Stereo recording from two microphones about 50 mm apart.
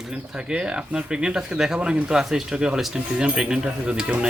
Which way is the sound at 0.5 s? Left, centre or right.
Centre.